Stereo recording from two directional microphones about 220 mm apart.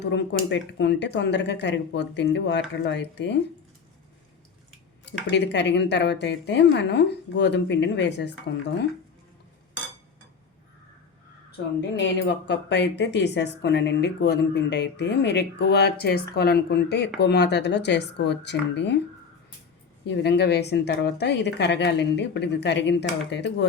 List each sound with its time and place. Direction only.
0.0 s speech: 50° left (ahead or behind)
5.3 s speech: 50° left (ahead or behind)
11.8 s speech: 55° left (ahead or behind)
20.1 s speech: 50° left (ahead or behind)